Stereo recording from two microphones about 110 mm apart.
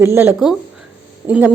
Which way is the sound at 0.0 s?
20° right (ahead or behind).